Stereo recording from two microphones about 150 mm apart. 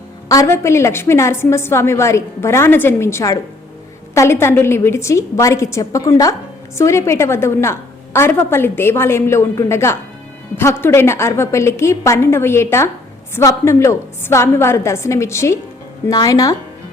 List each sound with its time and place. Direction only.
0.3 s a woman's voice: 20° left (ahead or behind)